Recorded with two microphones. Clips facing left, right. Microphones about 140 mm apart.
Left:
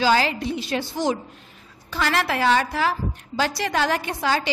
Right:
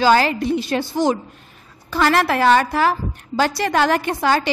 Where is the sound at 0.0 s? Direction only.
50° right (ahead or behind).